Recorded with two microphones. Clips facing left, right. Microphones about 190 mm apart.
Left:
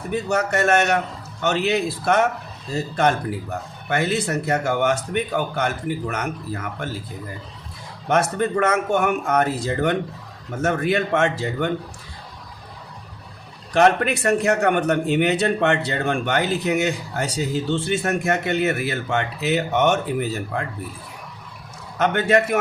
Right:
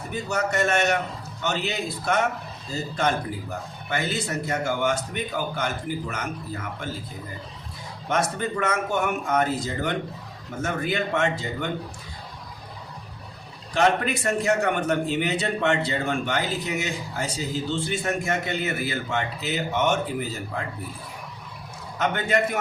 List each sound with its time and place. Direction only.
0.1 s a man's voice: 70° left (ahead or behind)
8.1 s a man's voice: 60° left (ahead or behind)
13.7 s a man's voice: 65° left (ahead or behind)
22.1 s a man's voice: 70° left (ahead or behind)